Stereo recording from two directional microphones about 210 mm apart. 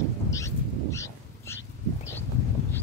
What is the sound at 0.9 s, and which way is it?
Dog, 15° left (ahead or behind).